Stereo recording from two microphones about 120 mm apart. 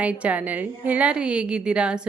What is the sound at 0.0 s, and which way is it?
A woman's voice, 10° right (ahead or behind).